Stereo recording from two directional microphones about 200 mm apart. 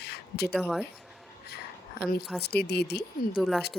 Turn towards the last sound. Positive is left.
turn(degrees=0)  # may be behind; listen again after turning